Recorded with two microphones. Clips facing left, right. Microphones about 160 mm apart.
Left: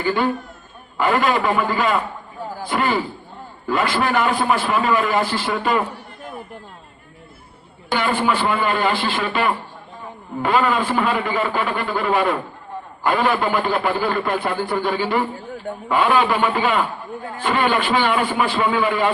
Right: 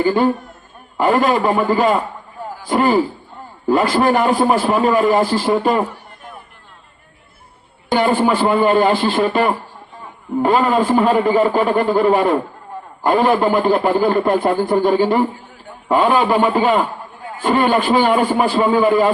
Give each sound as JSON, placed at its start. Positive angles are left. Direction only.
{"t": 0.0, "sound": "a man's voice", "side_deg": -35}
{"t": 7.9, "sound": "a man's voice", "side_deg": -40}